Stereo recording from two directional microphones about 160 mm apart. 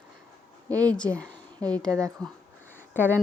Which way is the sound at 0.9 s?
5° left (ahead or behind).